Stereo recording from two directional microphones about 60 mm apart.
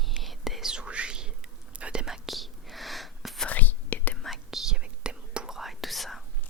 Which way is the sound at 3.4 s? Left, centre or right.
Left.